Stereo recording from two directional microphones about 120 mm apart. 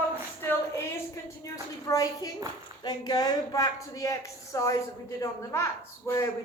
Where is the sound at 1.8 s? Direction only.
30° left (ahead or behind).